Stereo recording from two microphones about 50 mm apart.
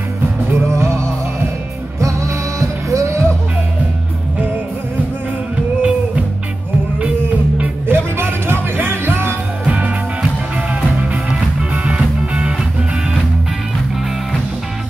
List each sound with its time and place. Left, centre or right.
0.5 s music: right
2.0 s music: right
2.9 s music: right
5.8 s music: right
7.8 s music: right
9.7 s music: right